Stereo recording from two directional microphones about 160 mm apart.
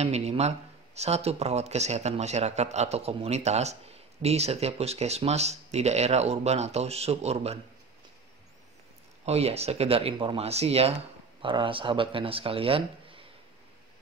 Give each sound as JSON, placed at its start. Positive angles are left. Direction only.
{"t": 0.0, "sound": "speech", "side_deg": -40}
{"t": 9.2, "sound": "speech", "side_deg": -40}